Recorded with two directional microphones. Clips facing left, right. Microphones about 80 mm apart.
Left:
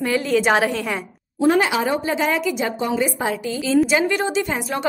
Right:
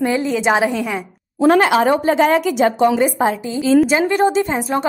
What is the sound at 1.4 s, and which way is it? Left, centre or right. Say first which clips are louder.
A woman's voice: right 5 dB; right.